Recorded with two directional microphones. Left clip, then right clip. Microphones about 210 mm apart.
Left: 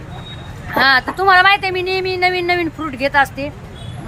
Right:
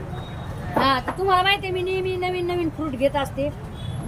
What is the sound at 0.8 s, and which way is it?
Speech, centre (ahead or behind).